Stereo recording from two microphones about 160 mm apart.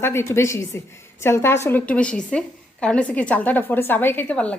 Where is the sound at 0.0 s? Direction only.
15° left (ahead or behind).